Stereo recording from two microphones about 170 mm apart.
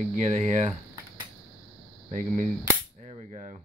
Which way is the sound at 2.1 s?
50° right (ahead or behind).